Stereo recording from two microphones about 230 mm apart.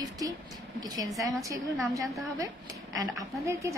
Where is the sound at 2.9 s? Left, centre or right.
Centre.